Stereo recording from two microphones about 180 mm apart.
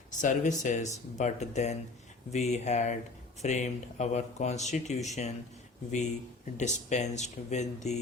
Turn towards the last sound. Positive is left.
turn(degrees=40)  # may be behind; listen again after turning